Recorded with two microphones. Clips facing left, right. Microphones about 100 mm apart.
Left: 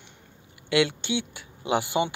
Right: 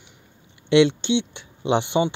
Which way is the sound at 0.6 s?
25° right (ahead or behind).